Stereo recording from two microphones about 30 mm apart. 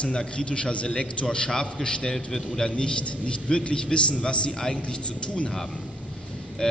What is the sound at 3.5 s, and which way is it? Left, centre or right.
A man's voice, left.